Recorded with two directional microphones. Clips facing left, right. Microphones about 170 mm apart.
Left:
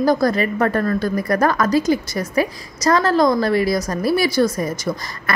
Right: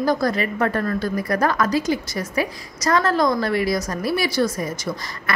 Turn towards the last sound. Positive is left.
turn(degrees=40)  # may be behind; listen again after turning